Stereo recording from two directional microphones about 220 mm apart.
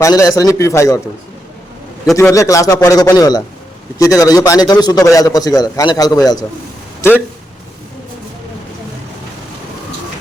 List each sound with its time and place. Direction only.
0.0 s a man's voice: 15° left (ahead or behind)
2.1 s a man's voice: 15° left (ahead or behind)